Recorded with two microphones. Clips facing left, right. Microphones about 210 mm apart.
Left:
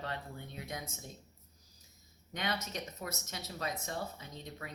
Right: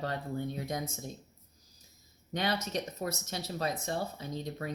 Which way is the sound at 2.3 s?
35° right (ahead or behind).